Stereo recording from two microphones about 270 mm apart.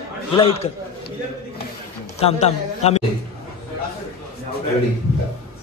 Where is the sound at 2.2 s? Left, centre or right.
Left.